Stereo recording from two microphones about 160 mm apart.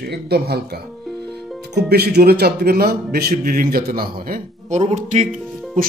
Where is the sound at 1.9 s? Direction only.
80° right; by 4.8 s 60° right (ahead or behind).